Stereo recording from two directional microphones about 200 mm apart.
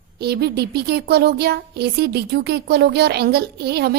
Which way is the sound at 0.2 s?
55° right (ahead or behind).